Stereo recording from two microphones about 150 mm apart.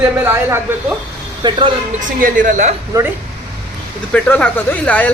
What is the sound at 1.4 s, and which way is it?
Speech, 30° right (ahead or behind).